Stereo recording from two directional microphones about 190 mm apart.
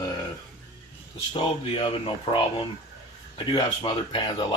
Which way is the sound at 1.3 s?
25° left (ahead or behind).